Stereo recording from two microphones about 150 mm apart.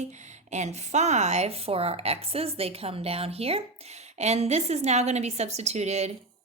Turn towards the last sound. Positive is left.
turn(degrees=-45)  # may be behind; listen again after turning